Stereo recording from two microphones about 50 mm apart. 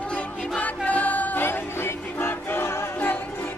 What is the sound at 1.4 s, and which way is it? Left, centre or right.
Music, left.